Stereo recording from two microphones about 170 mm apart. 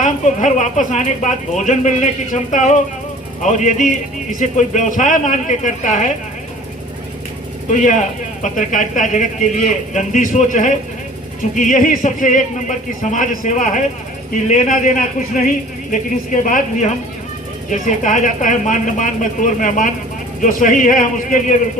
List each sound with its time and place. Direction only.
0.0 s a woman's voice: 45° left (ahead or behind)
7.7 s a woman's voice: 45° left (ahead or behind)